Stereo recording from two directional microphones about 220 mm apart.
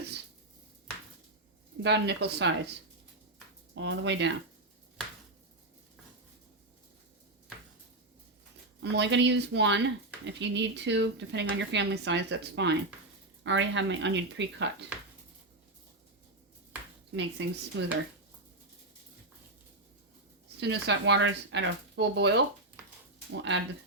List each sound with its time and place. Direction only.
1.8 s speech: 50° right (ahead or behind)
3.8 s speech: 55° right (ahead or behind)
8.8 s speech: 50° right (ahead or behind)
17.2 s speech: 55° right (ahead or behind)
20.6 s speech: 50° right (ahead or behind)